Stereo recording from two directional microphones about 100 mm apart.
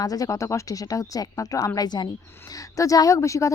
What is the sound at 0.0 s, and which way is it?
Speech, 35° left (ahead or behind).